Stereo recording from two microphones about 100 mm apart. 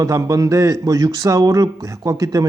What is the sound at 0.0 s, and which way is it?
Speech, 35° right (ahead or behind).